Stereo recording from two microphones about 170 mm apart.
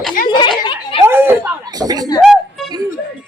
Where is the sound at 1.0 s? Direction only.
10° right (ahead or behind).